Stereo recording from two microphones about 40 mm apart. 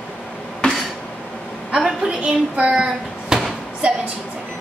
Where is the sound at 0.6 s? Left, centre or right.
Left.